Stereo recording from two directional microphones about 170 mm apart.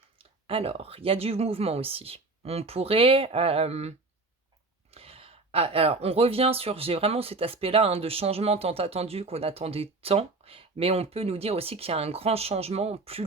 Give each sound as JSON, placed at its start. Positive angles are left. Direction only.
{"t": 0.2, "sound": "speech", "side_deg": -30}